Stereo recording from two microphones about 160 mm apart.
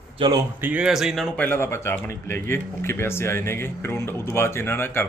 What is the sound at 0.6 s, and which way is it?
Speech, 10° right (ahead or behind).